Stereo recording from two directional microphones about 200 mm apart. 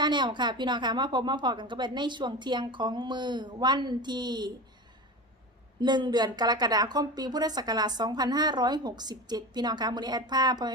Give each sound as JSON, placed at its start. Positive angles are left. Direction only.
{"t": 0.0, "sound": "a woman's voice", "side_deg": -20}
{"t": 5.8, "sound": "a woman's voice", "side_deg": -20}